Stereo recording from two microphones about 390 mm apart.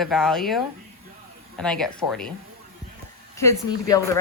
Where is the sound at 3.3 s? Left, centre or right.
Centre.